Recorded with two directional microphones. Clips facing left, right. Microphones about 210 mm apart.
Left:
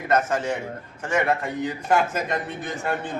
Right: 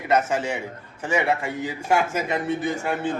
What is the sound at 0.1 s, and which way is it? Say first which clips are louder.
A man's voice: even; 10° right (ahead or behind).